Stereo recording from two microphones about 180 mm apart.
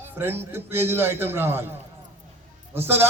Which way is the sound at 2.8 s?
15° right (ahead or behind).